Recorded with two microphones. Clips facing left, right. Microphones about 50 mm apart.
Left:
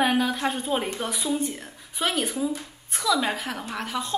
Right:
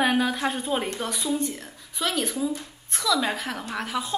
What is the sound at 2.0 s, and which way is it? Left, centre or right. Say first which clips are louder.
A woman's voice: left 1 dB; centre.